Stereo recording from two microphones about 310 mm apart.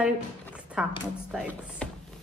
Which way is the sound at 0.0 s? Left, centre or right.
Centre.